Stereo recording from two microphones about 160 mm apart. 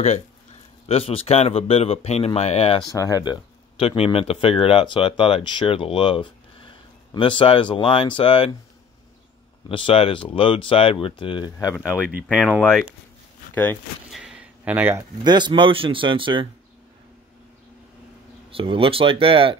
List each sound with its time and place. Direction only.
0.8 s speech: 35° left (ahead or behind)
2.9 s speech: 20° left (ahead or behind)
3.8 s speech: 35° left (ahead or behind)
9.7 s speech: 35° left (ahead or behind)
12.4 s speech: 5° right (ahead or behind)
14.1 s a sound: 5° right (ahead or behind)
15.2 s speech: 30° right (ahead or behind)
18.5 s speech: 35° right (ahead or behind)